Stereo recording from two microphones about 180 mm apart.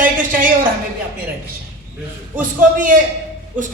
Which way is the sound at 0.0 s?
50° right (ahead or behind).